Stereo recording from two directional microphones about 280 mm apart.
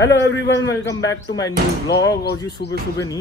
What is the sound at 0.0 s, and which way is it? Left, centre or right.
Speech, left.